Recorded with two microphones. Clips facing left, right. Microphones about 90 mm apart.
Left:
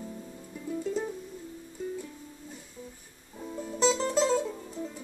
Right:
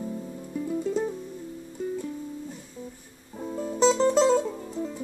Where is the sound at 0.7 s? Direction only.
5° right (ahead or behind).